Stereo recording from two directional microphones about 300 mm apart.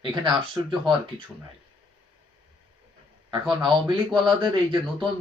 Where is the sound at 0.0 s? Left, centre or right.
Centre.